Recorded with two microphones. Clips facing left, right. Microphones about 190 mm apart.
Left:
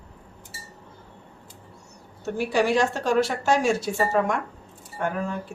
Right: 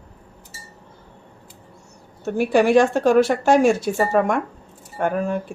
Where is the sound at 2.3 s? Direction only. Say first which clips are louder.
Right 7 dB; 55° right (ahead or behind).